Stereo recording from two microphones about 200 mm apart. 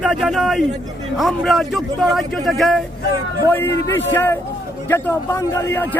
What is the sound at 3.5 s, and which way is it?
Speech, 10° left (ahead or behind).